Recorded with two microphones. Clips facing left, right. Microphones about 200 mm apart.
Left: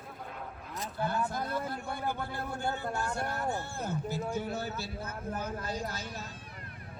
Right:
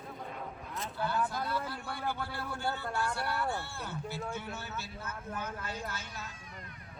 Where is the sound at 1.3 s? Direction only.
50° left (ahead or behind).